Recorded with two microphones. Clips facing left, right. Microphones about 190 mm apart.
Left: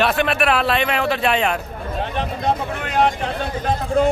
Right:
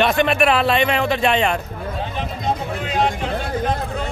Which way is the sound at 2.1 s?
60° left (ahead or behind).